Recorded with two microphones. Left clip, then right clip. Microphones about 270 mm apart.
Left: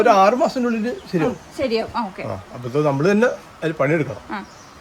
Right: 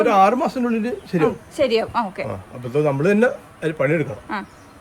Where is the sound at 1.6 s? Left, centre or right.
Right.